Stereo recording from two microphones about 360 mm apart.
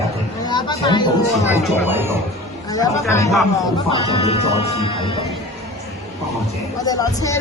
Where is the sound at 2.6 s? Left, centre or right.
Centre.